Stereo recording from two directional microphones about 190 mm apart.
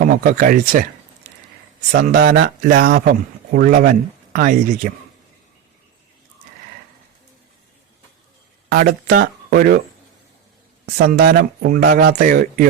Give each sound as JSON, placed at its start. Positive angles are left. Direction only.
{"t": 0.0, "sound": "speech", "side_deg": -50}
{"t": 1.9, "sound": "speech", "side_deg": -55}
{"t": 8.7, "sound": "speech", "side_deg": -50}
{"t": 10.9, "sound": "speech", "side_deg": -55}